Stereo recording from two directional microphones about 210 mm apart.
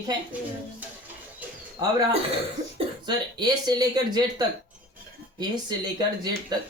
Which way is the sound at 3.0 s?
20° right (ahead or behind).